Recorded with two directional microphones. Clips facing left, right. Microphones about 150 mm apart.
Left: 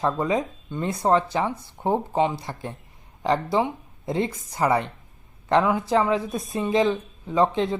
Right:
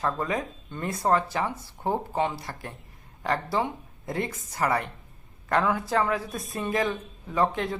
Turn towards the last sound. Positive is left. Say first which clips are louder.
# left 4 dB
turn(degrees=25)  # may be behind; listen again after turning